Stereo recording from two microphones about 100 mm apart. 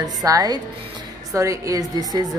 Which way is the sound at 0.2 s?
40° right (ahead or behind).